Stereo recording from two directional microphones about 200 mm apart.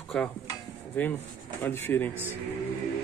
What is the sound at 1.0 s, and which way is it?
Speech, 10° left (ahead or behind).